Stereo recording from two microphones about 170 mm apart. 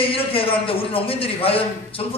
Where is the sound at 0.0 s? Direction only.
35° left (ahead or behind).